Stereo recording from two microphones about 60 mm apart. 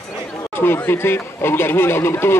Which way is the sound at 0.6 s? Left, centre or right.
Left.